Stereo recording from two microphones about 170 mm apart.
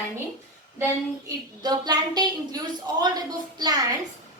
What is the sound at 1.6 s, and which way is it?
A woman's voice, 25° right (ahead or behind).